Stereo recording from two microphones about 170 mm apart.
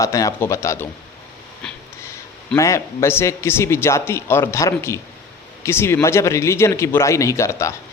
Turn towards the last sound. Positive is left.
turn(degrees=15)  # may be behind; listen again after turning